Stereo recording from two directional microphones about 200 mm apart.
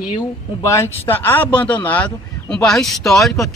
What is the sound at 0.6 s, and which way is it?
A man's voice, 15° left (ahead or behind).